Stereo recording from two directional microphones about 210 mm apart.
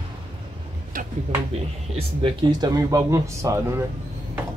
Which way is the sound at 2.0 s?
25° right (ahead or behind).